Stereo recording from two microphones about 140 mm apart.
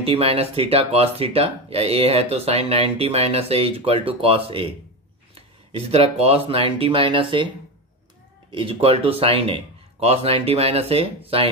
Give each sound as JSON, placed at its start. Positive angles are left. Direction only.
{"t": 0.0, "sound": "speech", "side_deg": -45}
{"t": 8.5, "sound": "speech", "side_deg": -40}